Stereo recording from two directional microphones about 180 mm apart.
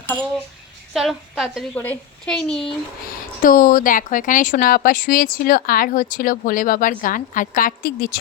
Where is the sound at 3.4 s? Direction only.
50° left (ahead or behind).